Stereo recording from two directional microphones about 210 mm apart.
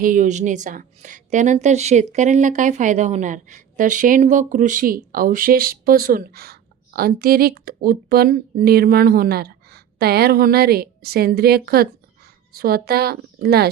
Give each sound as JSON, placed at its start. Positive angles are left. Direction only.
{"t": 0.0, "sound": "speech", "side_deg": -40}